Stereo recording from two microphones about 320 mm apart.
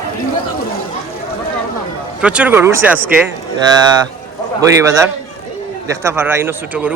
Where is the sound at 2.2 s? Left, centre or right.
Centre.